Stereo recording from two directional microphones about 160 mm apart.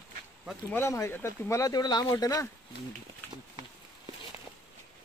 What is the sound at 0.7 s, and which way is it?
Speech, 15° left (ahead or behind).